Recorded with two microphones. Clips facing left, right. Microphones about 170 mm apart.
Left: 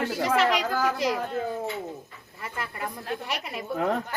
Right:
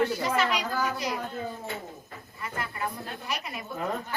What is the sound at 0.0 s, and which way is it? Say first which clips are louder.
A woman's voice: left 2 dB; 90° left.